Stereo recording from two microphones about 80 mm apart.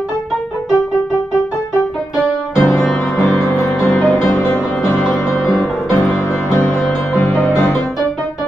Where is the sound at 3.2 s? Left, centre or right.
Centre.